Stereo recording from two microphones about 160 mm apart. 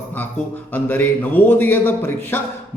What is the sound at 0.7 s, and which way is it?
A man's voice, 10° left (ahead or behind).